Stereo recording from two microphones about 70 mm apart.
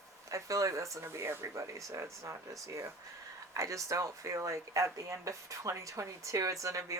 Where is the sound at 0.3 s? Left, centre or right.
Right.